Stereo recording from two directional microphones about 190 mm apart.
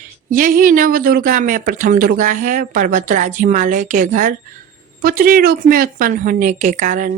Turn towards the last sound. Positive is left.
turn(degrees=-45)  # may be behind; listen again after turning